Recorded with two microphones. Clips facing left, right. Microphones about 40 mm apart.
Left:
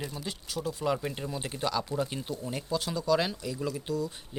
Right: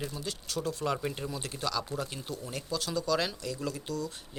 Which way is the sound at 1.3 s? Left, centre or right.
Left.